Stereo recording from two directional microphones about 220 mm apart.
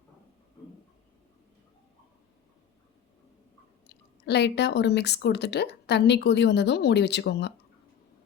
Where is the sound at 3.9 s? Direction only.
50° left (ahead or behind).